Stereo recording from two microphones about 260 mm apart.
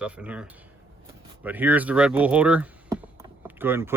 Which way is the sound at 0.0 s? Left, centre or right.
Centre.